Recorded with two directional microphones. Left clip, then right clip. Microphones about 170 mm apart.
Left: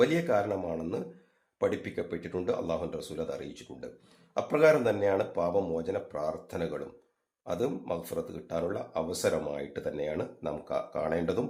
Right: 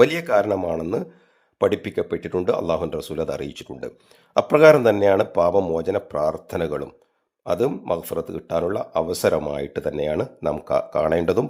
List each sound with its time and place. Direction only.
0.0 s speech: 50° right (ahead or behind)